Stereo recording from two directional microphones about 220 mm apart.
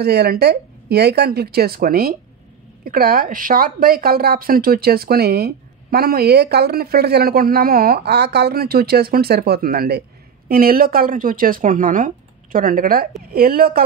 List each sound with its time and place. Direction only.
0.0 s a woman's voice: 45° right (ahead or behind)